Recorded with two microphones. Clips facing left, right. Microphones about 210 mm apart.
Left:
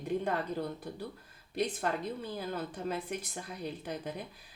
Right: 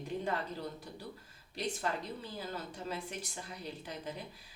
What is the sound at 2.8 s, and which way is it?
Speech, 55° left (ahead or behind).